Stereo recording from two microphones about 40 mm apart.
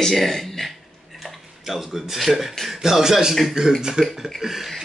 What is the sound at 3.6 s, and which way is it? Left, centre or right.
Speech, right.